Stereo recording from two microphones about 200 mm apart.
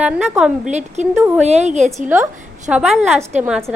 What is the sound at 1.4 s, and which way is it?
Speech, 35° right (ahead or behind).